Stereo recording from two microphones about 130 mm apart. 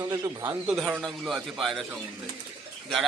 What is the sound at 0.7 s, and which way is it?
A man's voice, 10° right (ahead or behind).